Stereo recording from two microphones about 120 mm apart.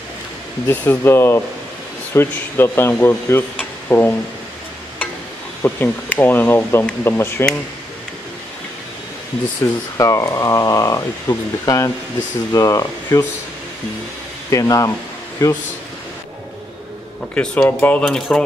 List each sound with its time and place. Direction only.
0.7 s speech: 20° left (ahead or behind)
3.5 s a sound: 15° left (ahead or behind)
5.6 s speech: 15° left (ahead or behind)
9.6 s speech: 25° left (ahead or behind)
14.5 s speech: 30° left (ahead or behind)
17.3 s speech: 10° left (ahead or behind)